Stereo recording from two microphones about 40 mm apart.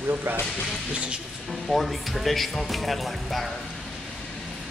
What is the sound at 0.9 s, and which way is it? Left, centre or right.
Speech, right.